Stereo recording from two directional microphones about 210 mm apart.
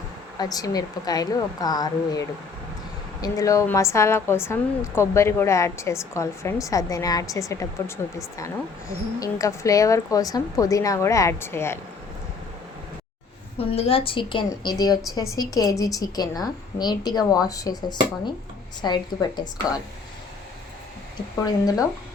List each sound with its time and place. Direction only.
0.3 s a woman's voice: 15° left (ahead or behind)
13.7 s a woman's voice: 25° left (ahead or behind)
21.4 s a woman's voice: 15° left (ahead or behind)